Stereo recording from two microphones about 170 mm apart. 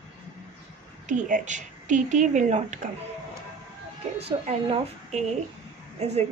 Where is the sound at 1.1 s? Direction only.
45° right (ahead or behind).